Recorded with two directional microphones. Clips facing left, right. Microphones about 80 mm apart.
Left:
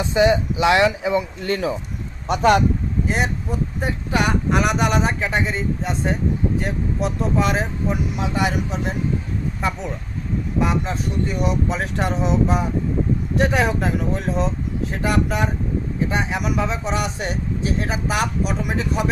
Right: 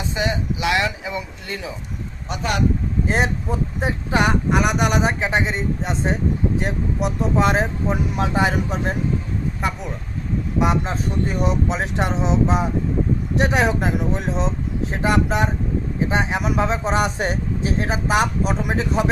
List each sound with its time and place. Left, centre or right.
0.1 s speech: left
1.5 s speech: left
3.1 s speech: right
4.5 s speech: centre
4.9 s speech: centre; by 9.0 s right
9.6 s speech: centre
11.3 s speech: right
11.7 s speech: right